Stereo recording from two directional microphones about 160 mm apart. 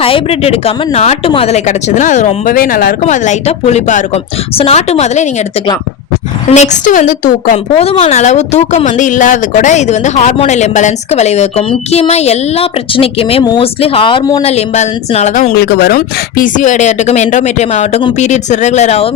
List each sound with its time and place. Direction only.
0.0 s a woman's voice: 35° left (ahead or behind); by 2.9 s 65° left (ahead or behind)
3.1 s a woman's voice: 45° left (ahead or behind)
6.5 s a woman's voice: 50° left (ahead or behind)
7.5 s a woman's voice: 40° left (ahead or behind)
15.5 s a woman's voice: 90° left; by 19.0 s 45° left (ahead or behind)